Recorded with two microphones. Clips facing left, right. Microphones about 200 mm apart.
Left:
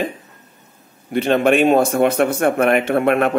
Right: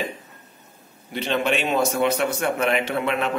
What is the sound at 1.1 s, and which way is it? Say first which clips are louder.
A man's voice: left 8 dB; 50° left (ahead or behind).